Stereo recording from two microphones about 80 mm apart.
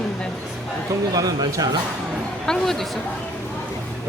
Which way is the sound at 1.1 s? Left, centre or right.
Right.